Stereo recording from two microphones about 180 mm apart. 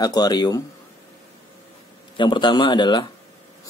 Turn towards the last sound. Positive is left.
turn(degrees=25)  # may be behind; listen again after turning